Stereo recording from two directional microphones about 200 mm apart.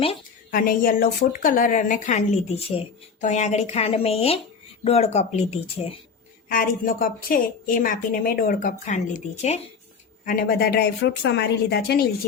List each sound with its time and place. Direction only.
0.5 s speech: 45° left (ahead or behind)
6.5 s a woman's voice: 45° left (ahead or behind)
10.2 s a woman's voice: 50° left (ahead or behind)